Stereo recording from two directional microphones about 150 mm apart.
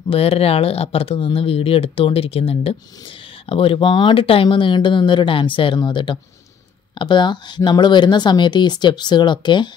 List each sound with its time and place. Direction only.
0.1 s speech: 40° left (ahead or behind)